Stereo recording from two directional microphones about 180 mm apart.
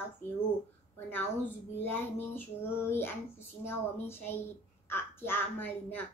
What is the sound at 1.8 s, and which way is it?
A child's voice, 10° left (ahead or behind).